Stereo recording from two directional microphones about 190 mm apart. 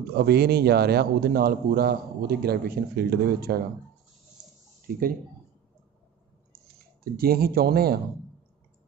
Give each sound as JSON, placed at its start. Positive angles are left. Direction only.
{"t": 0.1, "sound": "a man's voice", "side_deg": -55}
{"t": 4.9, "sound": "speech", "side_deg": -50}
{"t": 7.2, "sound": "speech", "side_deg": -50}